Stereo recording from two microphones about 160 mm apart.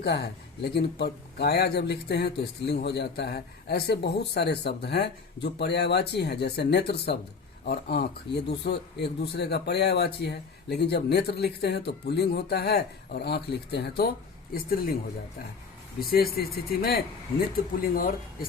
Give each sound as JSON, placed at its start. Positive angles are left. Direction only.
{"t": 0.0, "sound": "speech", "side_deg": 90}
{"t": 14.5, "sound": "speech", "side_deg": 65}
{"t": 16.0, "sound": "speech", "side_deg": 70}